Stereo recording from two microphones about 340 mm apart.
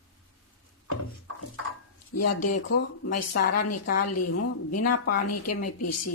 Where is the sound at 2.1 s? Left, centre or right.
Left.